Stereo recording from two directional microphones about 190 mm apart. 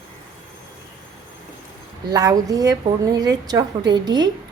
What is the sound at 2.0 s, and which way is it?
A woman's voice, 20° right (ahead or behind).